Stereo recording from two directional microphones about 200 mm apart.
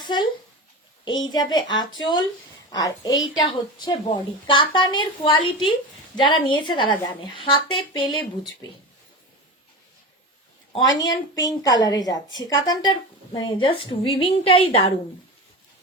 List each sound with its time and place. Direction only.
0.0 s a woman's voice: 20° left (ahead or behind)
11.0 s a woman's voice: 20° left (ahead or behind)